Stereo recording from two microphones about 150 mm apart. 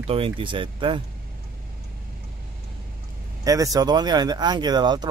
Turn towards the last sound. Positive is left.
turn(degrees=-30)  # may be behind; listen again after turning